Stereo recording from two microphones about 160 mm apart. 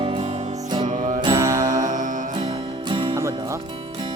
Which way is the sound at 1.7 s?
55° right (ahead or behind).